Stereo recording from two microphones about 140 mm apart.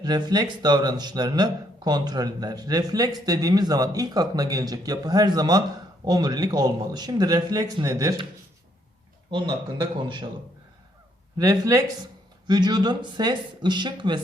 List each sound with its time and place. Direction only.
0.0 s speech: 30° right (ahead or behind)
11.3 s speech: 25° right (ahead or behind)